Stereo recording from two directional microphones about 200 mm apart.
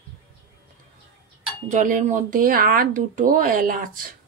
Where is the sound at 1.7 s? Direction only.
40° right (ahead or behind).